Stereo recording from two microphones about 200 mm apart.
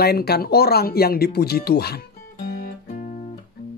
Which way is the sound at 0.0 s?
50° left (ahead or behind).